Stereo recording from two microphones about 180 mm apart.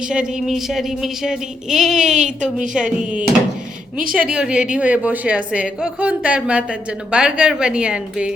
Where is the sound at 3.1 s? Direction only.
5° right (ahead or behind).